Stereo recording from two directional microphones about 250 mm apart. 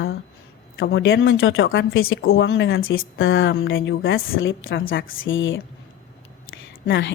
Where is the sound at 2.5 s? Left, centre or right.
Left.